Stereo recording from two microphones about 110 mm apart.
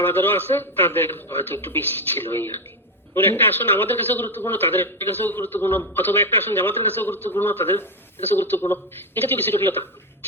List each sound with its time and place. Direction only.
0.0 s a man's voice: 20° left (ahead or behind)